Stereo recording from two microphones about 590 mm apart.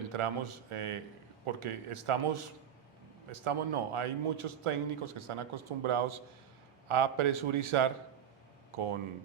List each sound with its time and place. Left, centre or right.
0.1 s a man's voice: right